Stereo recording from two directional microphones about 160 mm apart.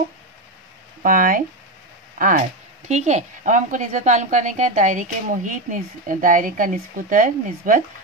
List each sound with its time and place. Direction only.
1.0 s speech: 60° right (ahead or behind)
2.9 s a woman's voice: 45° right (ahead or behind)